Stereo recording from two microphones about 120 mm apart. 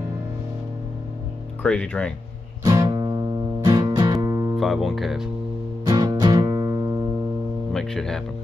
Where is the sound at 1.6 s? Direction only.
10° left (ahead or behind).